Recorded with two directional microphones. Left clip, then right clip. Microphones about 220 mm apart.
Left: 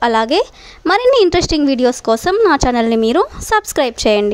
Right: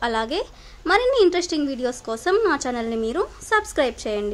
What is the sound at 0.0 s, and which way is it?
A woman's voice, 35° left (ahead or behind).